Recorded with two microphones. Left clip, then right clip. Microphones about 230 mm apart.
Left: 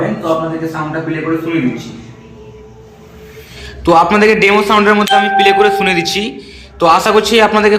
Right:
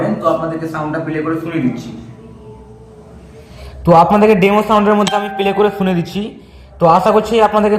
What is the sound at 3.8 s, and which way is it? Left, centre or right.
A man's voice, right.